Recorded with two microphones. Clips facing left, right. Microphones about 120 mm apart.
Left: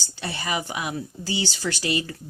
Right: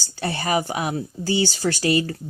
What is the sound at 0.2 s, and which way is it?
Speech, 50° right (ahead or behind).